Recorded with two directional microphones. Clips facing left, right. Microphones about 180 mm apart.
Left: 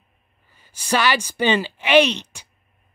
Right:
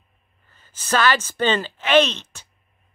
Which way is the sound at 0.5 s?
10° left (ahead or behind).